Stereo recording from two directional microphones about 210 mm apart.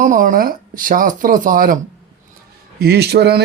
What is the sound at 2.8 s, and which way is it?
Speech, 50° right (ahead or behind).